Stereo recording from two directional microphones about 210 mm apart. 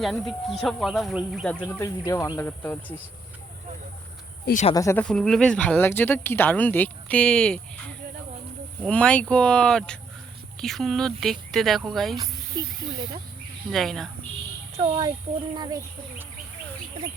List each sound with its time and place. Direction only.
0.0 s speech: centre (ahead or behind)
4.7 s speech: 15° left (ahead or behind)
8.8 s speech: 5° left (ahead or behind)
12.1 s speech: 15° right (ahead or behind)
13.7 s speech: centre (ahead or behind)
14.8 s speech: 20° right (ahead or behind)